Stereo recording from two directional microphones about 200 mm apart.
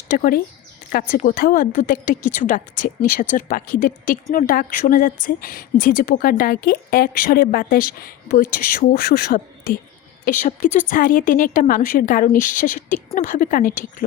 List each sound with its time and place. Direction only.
0.1 s a woman's voice: 45° left (ahead or behind)